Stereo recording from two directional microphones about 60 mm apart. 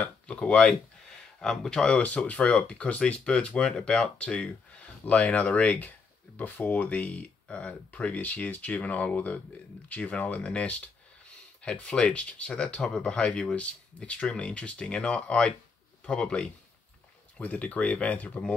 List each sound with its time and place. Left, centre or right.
0.0 s a man's voice: centre